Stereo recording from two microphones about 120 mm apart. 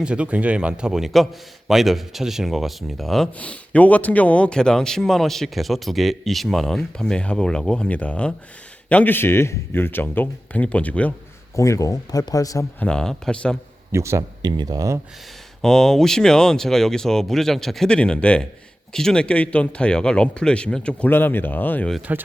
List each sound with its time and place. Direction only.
0.0 s a man's voice: 10° right (ahead or behind); by 11.1 s 10° left (ahead or behind)
11.5 s speech: 25° left (ahead or behind)
12.8 s a man's voice: 5° left (ahead or behind)
13.9 s speech: 25° right (ahead or behind)
14.4 s speech: 35° right (ahead or behind)
15.6 s a man's voice: 5° left (ahead or behind)
22.1 s speech: 15° right (ahead or behind)